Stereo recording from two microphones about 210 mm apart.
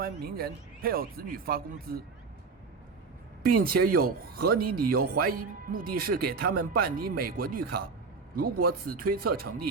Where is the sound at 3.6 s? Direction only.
45° right (ahead or behind).